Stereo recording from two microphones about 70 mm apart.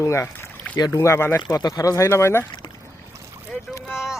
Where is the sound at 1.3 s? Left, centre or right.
Left.